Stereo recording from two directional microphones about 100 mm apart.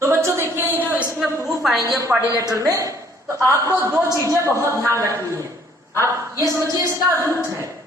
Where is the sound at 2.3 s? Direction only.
30° left (ahead or behind).